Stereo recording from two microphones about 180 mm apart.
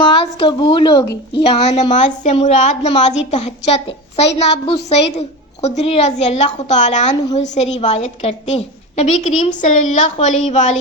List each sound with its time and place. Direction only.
0.0 s a woman's voice: 30° left (ahead or behind)